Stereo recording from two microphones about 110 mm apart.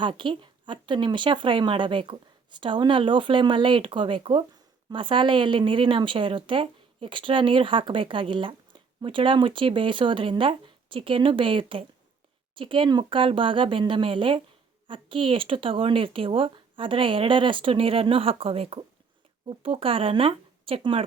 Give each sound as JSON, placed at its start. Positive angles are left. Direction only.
{"t": 0.0, "sound": "speech", "side_deg": -50}